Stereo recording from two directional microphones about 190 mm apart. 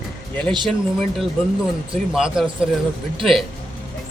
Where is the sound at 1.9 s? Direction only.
5° right (ahead or behind).